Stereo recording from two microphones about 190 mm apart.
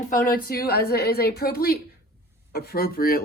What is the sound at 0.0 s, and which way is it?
Speech, 45° left (ahead or behind).